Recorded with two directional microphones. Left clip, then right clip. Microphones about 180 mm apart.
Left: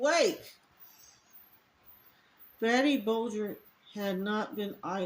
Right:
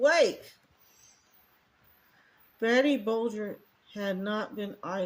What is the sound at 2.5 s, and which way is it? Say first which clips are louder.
Speech: right 2 dB; 50° right (ahead or behind).